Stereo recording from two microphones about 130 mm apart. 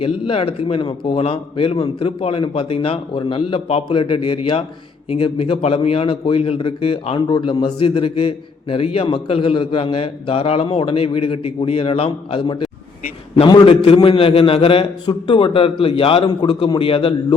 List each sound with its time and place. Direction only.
0.0 s a man's voice: 45° left (ahead or behind)
13.4 s a man's voice: 30° left (ahead or behind)
13.7 s a man's voice: 45° left (ahead or behind)